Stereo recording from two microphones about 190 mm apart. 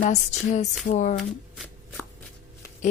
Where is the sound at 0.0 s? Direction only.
40° left (ahead or behind).